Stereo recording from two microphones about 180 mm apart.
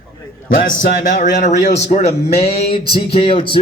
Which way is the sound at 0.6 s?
50° left (ahead or behind).